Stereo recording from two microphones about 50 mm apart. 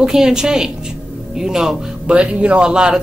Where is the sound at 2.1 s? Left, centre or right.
Right.